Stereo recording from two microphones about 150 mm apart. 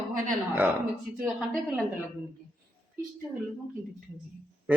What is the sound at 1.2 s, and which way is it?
Speech, 5° right (ahead or behind).